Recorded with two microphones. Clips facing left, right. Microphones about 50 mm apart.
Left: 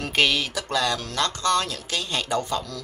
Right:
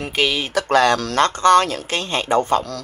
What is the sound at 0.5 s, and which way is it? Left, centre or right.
Speech, right.